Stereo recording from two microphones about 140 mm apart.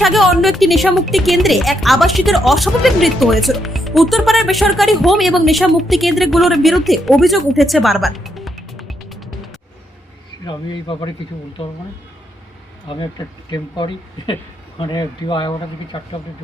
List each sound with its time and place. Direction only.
0.0 s speech: centre (ahead or behind)
10.4 s speech: 35° left (ahead or behind)
12.9 s speech: 35° left (ahead or behind)